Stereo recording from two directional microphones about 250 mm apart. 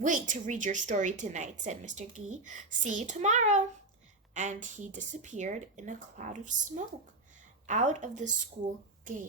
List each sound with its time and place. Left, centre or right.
0.0 s a woman's voice: right